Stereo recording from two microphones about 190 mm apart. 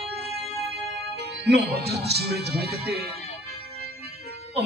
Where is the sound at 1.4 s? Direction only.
60° right (ahead or behind).